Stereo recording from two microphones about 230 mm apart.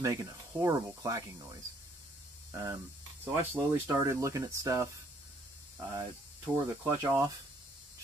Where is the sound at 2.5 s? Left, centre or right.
Centre.